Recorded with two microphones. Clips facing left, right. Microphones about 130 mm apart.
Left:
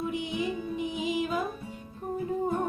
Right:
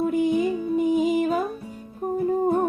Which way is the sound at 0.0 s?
50° right (ahead or behind).